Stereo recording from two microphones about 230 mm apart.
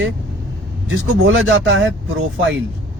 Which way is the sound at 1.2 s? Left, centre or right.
Right.